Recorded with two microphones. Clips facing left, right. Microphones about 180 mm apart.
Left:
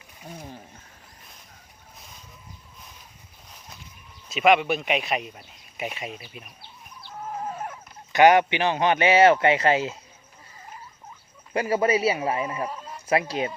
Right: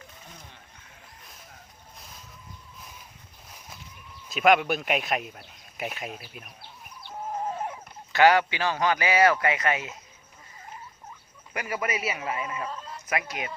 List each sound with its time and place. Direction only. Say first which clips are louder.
4.3 s speech: left 2 dB; centre (ahead or behind)
8.1 s speech: left 3 dB; 20° left (ahead or behind)
11.5 s a man's voice: left 9 dB; 30° left (ahead or behind)
12.6 s fowl: left 3 dB; 15° left (ahead or behind)
13.1 s a man's voice: left 7 dB; 30° left (ahead or behind)